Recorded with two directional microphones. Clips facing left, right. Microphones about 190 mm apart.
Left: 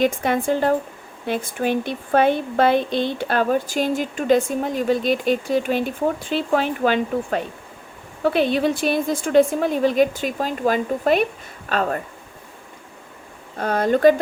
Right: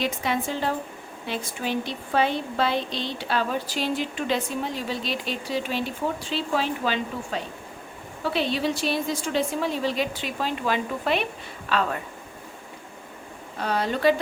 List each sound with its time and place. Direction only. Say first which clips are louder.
0.0 s speech: left 7 dB; 50° left (ahead or behind)
13.6 s speech: left 7 dB; 50° left (ahead or behind)